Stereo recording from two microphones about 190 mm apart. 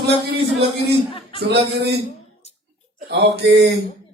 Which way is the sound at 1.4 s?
60° right (ahead or behind).